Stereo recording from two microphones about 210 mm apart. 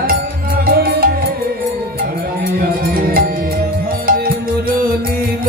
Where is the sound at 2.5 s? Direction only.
45° right (ahead or behind).